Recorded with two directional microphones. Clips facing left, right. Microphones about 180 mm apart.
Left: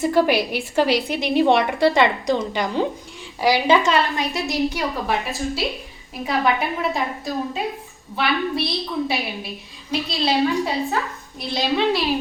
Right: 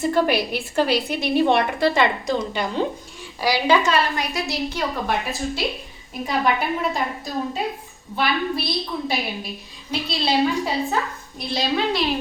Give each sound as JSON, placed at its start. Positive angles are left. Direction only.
{"t": 0.0, "sound": "a woman's voice", "side_deg": 15}
{"t": 5.0, "sound": "a woman's voice", "side_deg": 0}
{"t": 8.1, "sound": "a woman's voice", "side_deg": 0}